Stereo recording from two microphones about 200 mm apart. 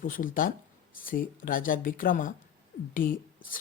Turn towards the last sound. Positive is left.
turn(degrees=45)  # may be behind; listen again after turning